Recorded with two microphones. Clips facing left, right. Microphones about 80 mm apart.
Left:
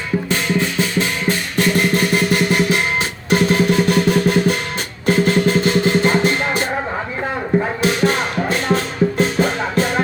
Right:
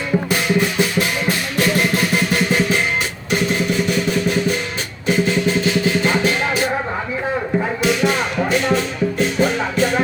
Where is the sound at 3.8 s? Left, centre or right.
Left.